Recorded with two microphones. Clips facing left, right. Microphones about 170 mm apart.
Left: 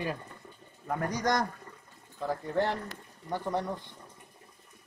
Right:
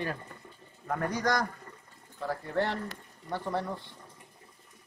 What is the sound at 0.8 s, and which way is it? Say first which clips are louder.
Speech: even; 10° left (ahead or behind).